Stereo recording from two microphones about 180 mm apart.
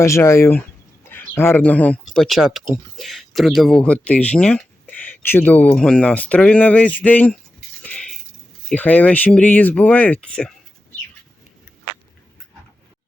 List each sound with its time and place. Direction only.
0.0 s speech: 15° left (ahead or behind)
7.8 s a sound: 5° left (ahead or behind)
8.7 s speech: 10° left (ahead or behind)